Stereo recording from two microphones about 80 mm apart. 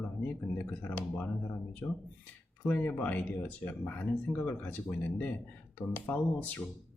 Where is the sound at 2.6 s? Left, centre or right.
Centre.